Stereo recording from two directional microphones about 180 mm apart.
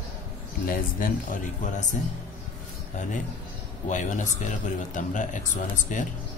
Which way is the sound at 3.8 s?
45° left (ahead or behind).